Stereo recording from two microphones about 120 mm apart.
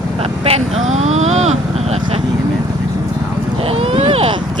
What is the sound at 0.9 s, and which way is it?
Vehicle, 70° right (ahead or behind).